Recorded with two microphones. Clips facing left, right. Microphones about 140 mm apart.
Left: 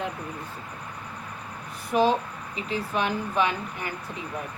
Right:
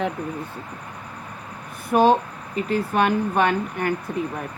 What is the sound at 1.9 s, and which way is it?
A woman's voice, 55° right (ahead or behind).